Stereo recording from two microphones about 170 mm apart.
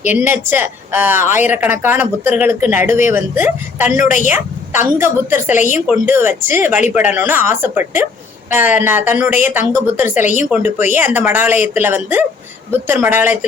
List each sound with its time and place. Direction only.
0.0 s speech: 10° right (ahead or behind)
3.9 s a woman's voice: 50° left (ahead or behind)
4.4 s speech: 15° right (ahead or behind)